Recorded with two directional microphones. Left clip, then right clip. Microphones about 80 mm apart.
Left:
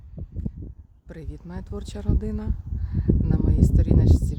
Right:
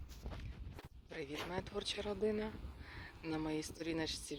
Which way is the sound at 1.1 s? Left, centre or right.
Left.